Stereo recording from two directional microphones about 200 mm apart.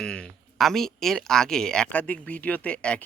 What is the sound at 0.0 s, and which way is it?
Speech, 5° left (ahead or behind).